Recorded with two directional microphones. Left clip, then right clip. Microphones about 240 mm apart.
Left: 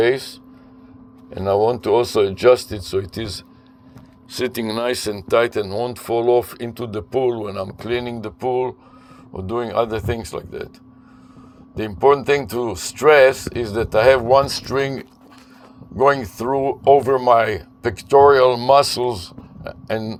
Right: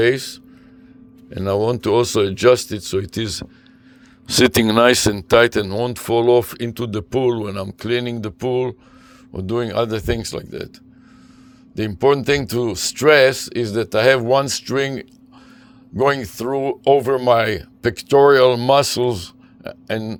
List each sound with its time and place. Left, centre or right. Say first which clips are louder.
0.0 s speech: right 1 dB; right
11.8 s speech: left 1 dB; right